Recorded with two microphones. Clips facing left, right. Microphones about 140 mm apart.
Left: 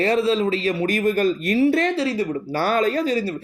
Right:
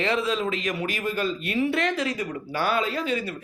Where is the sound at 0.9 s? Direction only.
45° left (ahead or behind).